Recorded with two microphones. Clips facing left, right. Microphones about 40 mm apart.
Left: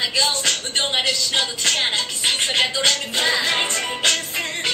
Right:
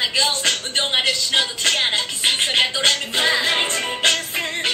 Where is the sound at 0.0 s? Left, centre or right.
Centre.